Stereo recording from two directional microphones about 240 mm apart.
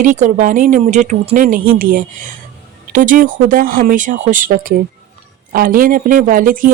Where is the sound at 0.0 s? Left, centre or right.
Right.